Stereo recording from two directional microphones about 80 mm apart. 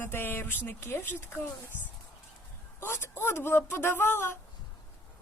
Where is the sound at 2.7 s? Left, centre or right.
Left.